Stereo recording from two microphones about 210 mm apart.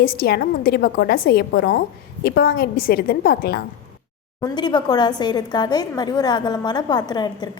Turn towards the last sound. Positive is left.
turn(degrees=20)  # may be behind; listen again after turning